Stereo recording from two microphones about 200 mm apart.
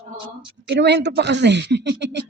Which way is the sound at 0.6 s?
55° right (ahead or behind).